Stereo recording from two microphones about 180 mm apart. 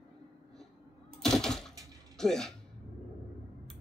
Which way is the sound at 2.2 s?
Centre (ahead or behind).